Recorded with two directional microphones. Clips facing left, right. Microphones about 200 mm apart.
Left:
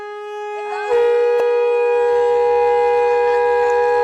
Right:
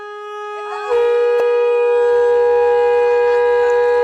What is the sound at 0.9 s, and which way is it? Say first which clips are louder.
Music: right 1 dB; centre (ahead or behind).